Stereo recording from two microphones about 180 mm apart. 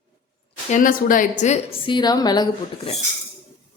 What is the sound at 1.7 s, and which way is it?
Speech, 25° left (ahead or behind).